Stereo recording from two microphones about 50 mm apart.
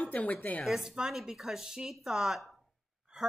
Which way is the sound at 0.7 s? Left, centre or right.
Centre.